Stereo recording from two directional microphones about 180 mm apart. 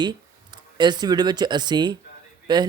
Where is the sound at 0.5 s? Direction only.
25° right (ahead or behind).